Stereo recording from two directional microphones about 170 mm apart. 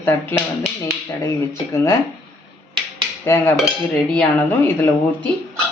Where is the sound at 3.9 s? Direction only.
5° left (ahead or behind).